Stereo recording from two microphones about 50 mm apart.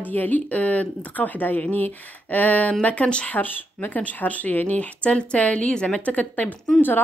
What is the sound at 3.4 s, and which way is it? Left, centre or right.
Speech, left.